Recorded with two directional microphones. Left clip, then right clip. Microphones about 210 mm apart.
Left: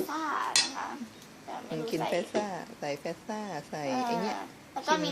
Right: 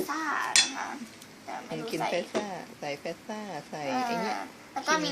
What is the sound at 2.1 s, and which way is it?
A woman's voice, 15° left (ahead or behind).